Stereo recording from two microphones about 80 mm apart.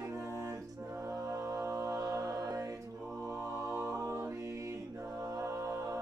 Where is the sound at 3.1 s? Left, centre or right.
Right.